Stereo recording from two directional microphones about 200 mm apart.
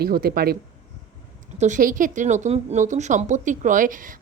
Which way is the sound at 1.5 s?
35° right (ahead or behind).